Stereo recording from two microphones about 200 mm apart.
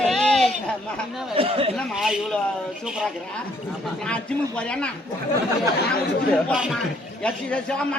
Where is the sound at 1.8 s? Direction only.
Centre (ahead or behind).